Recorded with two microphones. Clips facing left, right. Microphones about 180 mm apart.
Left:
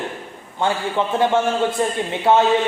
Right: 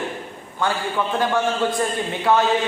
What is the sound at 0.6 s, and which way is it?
A man's voice, 25° left (ahead or behind).